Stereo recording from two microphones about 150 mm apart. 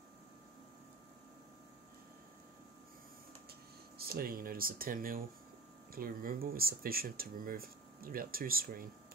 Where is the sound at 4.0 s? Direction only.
85° right.